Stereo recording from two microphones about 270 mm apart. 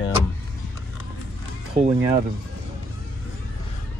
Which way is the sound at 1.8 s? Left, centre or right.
Right.